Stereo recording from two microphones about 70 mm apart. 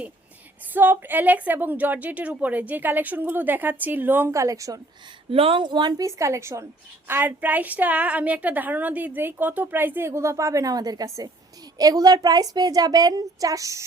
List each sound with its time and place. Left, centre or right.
0.6 s a woman's voice: right
4.3 s a woman's voice: right
5.6 s a woman's voice: right
6.0 s a woman's voice: right
7.1 s a woman's voice: right
10.1 s a woman's voice: right